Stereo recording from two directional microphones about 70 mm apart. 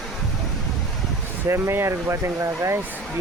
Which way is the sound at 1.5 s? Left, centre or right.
Right.